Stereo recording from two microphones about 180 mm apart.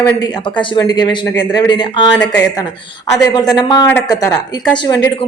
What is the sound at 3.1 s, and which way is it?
A woman's voice, 20° left (ahead or behind).